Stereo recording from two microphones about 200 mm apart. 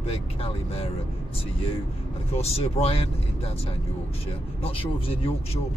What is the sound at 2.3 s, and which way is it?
Speech, 30° left (ahead or behind).